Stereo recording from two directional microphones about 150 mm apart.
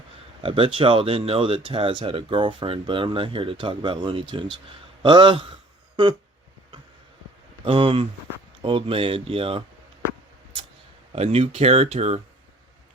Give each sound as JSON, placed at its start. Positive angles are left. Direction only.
{"t": 0.4, "sound": "speech", "side_deg": -35}
{"t": 7.6, "sound": "speech", "side_deg": -35}
{"t": 11.1, "sound": "speech", "side_deg": -45}